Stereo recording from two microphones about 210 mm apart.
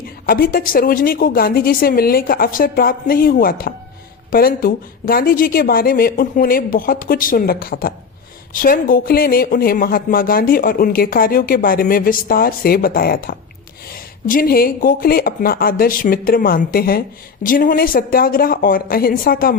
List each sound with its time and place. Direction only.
0.3 s speech: 45° left (ahead or behind)